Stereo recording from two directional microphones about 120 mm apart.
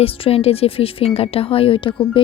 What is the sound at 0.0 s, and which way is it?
Speech, 55° left (ahead or behind).